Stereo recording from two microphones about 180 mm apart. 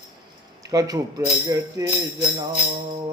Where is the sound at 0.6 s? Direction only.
20° right (ahead or behind).